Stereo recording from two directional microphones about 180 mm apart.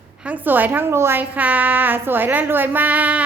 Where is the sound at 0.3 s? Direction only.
10° right (ahead or behind).